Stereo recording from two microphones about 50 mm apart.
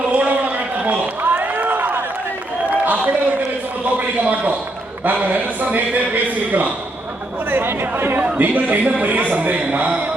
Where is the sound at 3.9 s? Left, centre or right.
Right.